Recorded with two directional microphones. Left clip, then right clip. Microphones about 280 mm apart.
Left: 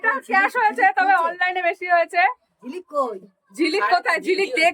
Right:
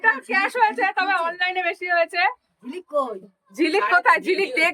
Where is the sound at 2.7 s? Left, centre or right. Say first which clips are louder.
Left 1 dB; left.